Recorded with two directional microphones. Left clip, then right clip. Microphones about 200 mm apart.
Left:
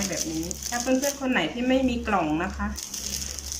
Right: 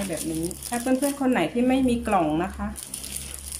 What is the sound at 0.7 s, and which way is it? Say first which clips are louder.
Speech: even; 25° right (ahead or behind).